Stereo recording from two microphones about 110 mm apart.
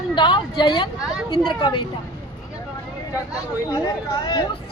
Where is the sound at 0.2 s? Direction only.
45° left (ahead or behind).